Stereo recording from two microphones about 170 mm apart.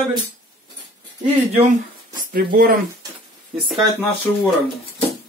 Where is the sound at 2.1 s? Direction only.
55° right (ahead or behind).